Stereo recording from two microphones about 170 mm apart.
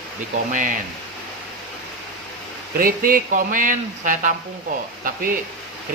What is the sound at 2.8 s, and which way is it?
Speech, 55° right (ahead or behind).